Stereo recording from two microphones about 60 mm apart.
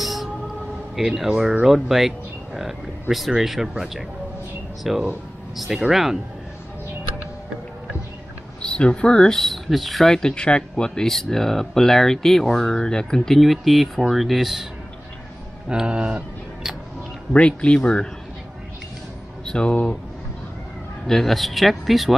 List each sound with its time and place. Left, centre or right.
0.0 s a sound: centre
0.9 s speech: centre
8.6 s speech: centre
15.7 s speech: centre
17.3 s speech: centre
19.4 s speech: centre
21.1 s speech: centre